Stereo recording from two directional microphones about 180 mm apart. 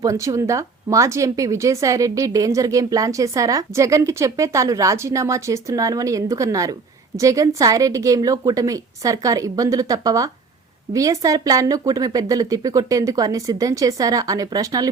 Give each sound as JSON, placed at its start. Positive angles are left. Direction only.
{"t": 0.0, "sound": "speech", "side_deg": -20}